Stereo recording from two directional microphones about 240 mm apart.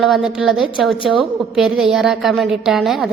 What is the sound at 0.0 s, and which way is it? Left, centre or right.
A woman's voice, centre.